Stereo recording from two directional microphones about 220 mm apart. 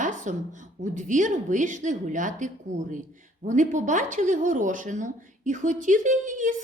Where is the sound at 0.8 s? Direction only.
35° right (ahead or behind).